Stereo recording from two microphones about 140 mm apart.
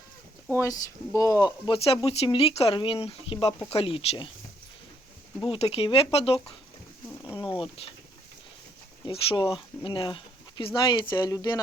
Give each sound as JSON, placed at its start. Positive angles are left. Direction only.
{"t": 0.6, "sound": "speech", "side_deg": 25}
{"t": 1.5, "sound": "speech", "side_deg": 35}
{"t": 5.4, "sound": "speech", "side_deg": 40}
{"t": 7.4, "sound": "speech", "side_deg": 40}
{"t": 9.0, "sound": "speech", "side_deg": 35}